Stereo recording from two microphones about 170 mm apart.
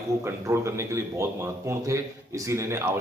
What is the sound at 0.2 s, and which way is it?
Speech, 15° right (ahead or behind).